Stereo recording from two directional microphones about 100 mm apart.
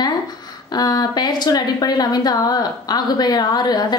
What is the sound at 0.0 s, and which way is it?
Speech, 40° left (ahead or behind).